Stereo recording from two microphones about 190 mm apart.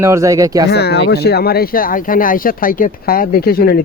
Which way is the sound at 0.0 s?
15° right (ahead or behind).